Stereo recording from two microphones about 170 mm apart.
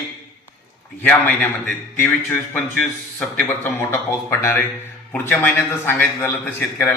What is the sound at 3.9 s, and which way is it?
A man's voice, 15° left (ahead or behind).